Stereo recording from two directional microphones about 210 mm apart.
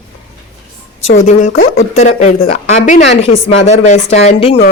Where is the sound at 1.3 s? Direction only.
35° left (ahead or behind).